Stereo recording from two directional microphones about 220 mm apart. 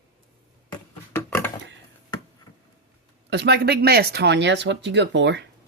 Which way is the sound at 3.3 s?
50° right (ahead or behind).